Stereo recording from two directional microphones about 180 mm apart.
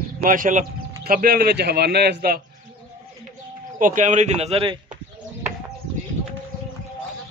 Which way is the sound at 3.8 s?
45° right (ahead or behind).